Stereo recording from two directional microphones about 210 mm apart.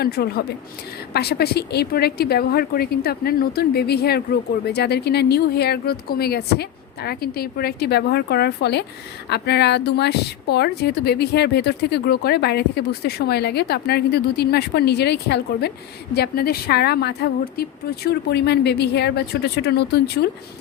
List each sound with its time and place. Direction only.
0.0 s speech: 50° left (ahead or behind)